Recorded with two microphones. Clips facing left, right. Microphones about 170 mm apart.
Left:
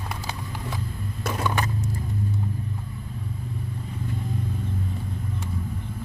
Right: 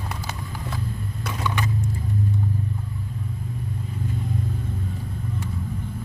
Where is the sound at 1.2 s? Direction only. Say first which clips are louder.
Left 2 dB; 50° left (ahead or behind).